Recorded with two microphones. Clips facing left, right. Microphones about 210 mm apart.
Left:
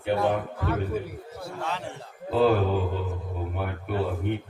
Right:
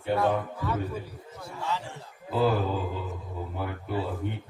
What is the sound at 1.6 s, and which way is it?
Speech, 65° left (ahead or behind).